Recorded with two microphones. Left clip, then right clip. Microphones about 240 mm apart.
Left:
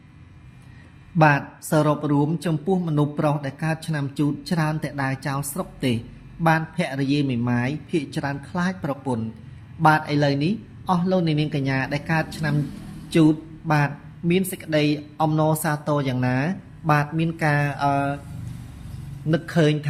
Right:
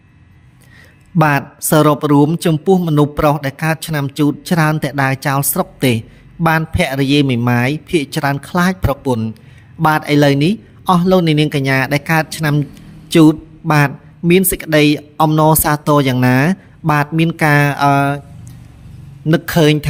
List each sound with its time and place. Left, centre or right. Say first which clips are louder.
1.2 s speech: right 4 dB; right
19.3 s speech: right 9 dB; right